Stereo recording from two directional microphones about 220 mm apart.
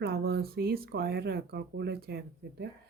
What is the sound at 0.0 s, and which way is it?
Speech, 45° right (ahead or behind).